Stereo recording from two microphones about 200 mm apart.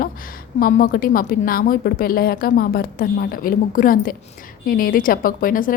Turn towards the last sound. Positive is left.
turn(degrees=45)  # may be behind; listen again after turning